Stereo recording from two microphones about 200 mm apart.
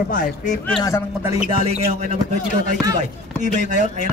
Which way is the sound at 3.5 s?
35° right (ahead or behind).